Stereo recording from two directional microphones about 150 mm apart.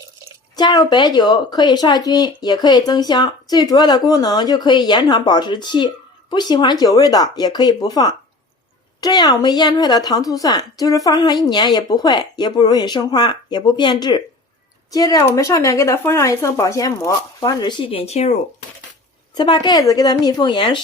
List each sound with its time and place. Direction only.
0.5 s a woman's voice: 25° left (ahead or behind); by 18.3 s 45° left (ahead or behind)
19.3 s a woman's voice: 30° left (ahead or behind)